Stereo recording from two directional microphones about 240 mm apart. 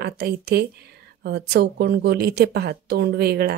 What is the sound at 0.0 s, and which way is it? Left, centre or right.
A woman's voice, right.